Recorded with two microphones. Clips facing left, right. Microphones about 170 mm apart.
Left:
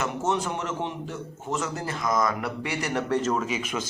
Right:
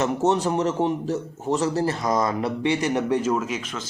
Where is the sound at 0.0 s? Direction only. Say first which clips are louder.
Right 6 dB; 35° right (ahead or behind); by 3.6 s 5° right (ahead or behind).